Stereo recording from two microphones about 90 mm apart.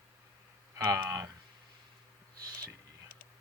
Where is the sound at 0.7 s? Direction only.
35° right (ahead or behind).